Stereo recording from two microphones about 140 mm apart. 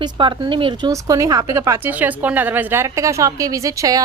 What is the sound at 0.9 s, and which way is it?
A woman's voice, 25° right (ahead or behind).